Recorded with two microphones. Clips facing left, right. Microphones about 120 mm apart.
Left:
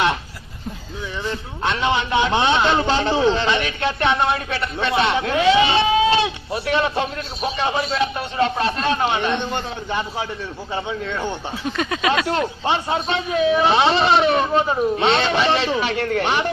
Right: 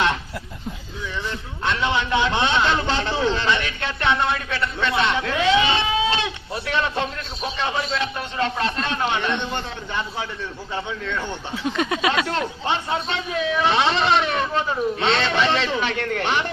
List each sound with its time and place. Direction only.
1.6 s a man's voice: 15° left (ahead or behind)
11.0 s speech: 40° left (ahead or behind)
11.6 s a sound: 20° right (ahead or behind)
12.2 s a man's voice: 15° left (ahead or behind)